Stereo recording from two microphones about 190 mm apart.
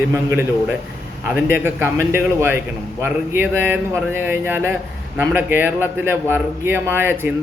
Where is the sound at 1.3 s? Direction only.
10° right (ahead or behind).